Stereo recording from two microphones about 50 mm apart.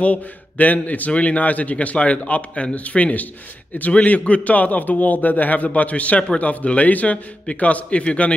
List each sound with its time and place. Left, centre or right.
0.0 s a man's voice: left